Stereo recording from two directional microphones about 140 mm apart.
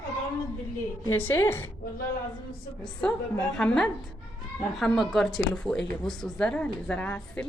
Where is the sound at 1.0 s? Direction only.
15° left (ahead or behind).